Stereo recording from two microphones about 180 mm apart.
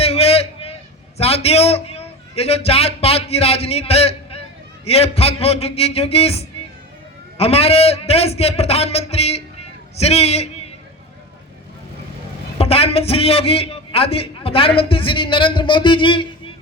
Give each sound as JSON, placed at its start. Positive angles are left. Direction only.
{"t": 0.0, "sound": "a sound", "side_deg": 35}
{"t": 1.2, "sound": "a man's voice", "side_deg": 35}
{"t": 12.5, "sound": "a man's voice", "side_deg": 35}